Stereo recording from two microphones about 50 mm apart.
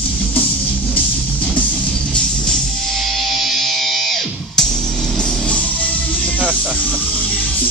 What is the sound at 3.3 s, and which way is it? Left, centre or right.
Music, centre.